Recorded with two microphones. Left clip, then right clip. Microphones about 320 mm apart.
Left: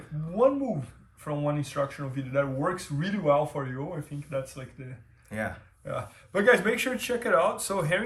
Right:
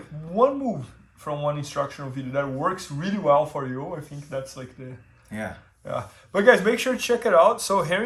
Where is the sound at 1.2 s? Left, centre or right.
Centre.